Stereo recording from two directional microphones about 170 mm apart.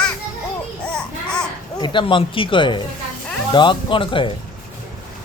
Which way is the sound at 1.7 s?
25° left (ahead or behind).